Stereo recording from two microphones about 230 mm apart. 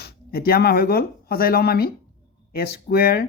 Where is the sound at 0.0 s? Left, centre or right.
Left.